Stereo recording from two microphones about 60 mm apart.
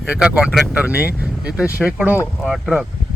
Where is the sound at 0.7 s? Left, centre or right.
Right.